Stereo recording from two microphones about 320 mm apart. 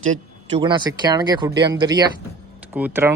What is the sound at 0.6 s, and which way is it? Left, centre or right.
Speech, centre.